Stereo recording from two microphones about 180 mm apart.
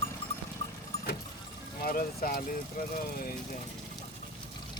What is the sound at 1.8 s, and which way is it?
Speech, 55° left (ahead or behind).